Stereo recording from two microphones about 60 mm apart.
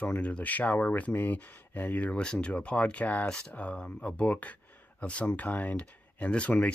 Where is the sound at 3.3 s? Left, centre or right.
Centre.